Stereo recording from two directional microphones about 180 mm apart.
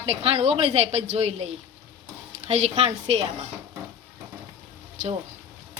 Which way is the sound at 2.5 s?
40° right (ahead or behind).